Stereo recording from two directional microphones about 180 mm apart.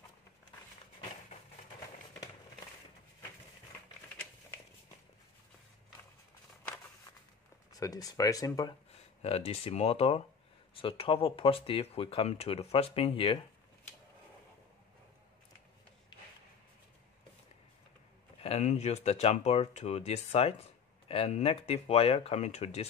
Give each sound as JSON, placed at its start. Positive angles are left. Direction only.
{"t": 7.8, "sound": "speech", "side_deg": 20}
{"t": 9.2, "sound": "speech", "side_deg": 35}
{"t": 18.4, "sound": "speech", "side_deg": 35}